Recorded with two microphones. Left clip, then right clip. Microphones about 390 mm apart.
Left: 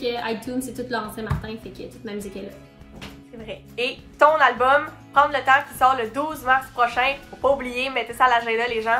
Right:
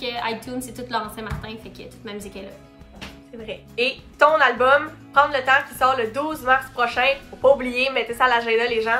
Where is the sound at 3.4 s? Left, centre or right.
Centre.